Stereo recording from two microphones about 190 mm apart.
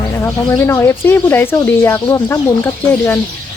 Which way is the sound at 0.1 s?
15° left (ahead or behind).